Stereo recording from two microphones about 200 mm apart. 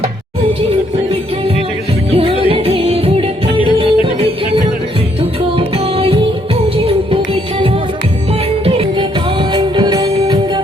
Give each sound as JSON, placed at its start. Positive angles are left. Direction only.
{"t": 0.7, "sound": "music", "side_deg": -30}
{"t": 8.3, "sound": "music", "side_deg": -30}